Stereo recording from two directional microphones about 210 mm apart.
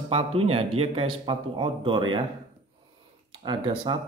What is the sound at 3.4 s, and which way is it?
Speech, 20° right (ahead or behind).